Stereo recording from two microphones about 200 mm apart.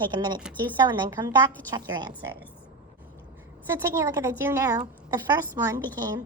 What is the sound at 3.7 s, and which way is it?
A woman's voice, 15° right (ahead or behind).